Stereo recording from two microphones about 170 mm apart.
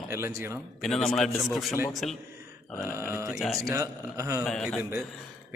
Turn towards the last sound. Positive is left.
turn(degrees=0)  # may be behind; listen again after turning